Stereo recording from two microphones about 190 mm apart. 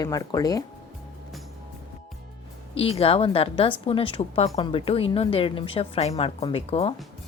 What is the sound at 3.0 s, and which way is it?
A woman's voice, 30° left (ahead or behind).